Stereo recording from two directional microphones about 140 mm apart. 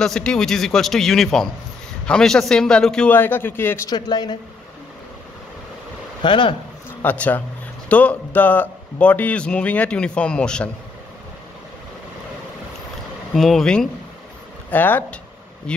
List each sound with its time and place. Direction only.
0.0 s a man's voice: 5° left (ahead or behind)
3.9 s speech: 30° left (ahead or behind)
6.2 s speech: 35° left (ahead or behind)
7.0 s speech: 10° left (ahead or behind)
13.3 s a man's voice: centre (ahead or behind)